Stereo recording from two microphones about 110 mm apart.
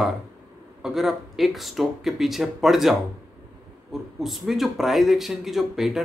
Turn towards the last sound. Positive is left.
turn(degrees=-5)  # may be behind; listen again after turning